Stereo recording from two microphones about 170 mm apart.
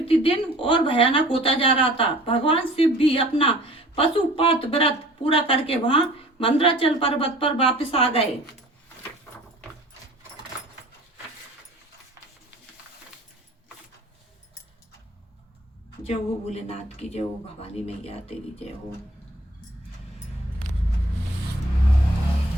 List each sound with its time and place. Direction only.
0.0 s speech: 35° left (ahead or behind)
16.0 s speech: 35° left (ahead or behind)